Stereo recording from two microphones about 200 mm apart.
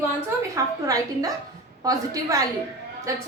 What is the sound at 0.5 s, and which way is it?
A woman's voice, 15° right (ahead or behind).